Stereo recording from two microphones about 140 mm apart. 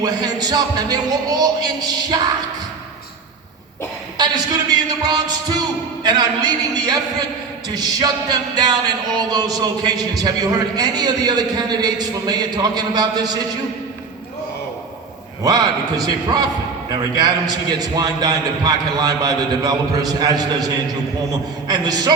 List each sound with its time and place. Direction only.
0.0 s music: 30° right (ahead or behind)
4.7 s music: 30° right (ahead or behind)
15.4 s music: 25° right (ahead or behind)